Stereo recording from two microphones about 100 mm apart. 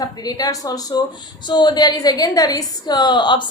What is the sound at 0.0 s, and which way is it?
A woman's voice, 40° left (ahead or behind).